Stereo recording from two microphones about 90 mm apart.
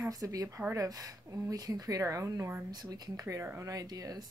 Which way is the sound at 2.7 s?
45° right (ahead or behind).